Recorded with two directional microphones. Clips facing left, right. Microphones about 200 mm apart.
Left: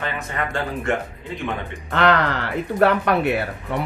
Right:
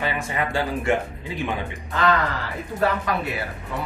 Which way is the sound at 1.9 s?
70° left (ahead or behind).